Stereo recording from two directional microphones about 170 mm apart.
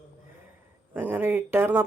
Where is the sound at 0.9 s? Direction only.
10° right (ahead or behind).